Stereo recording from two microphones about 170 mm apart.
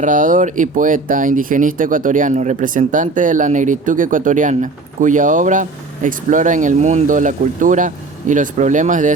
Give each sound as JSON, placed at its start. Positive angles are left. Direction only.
{"t": 0.0, "sound": "speech", "side_deg": -50}